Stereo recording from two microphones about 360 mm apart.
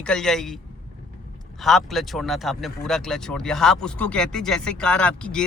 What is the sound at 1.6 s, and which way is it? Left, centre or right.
A woman's voice, centre.